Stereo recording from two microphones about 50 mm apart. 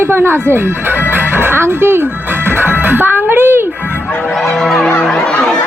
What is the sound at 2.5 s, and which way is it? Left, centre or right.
Music, right.